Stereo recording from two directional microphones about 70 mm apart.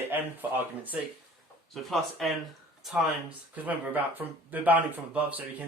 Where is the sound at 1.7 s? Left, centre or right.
Centre.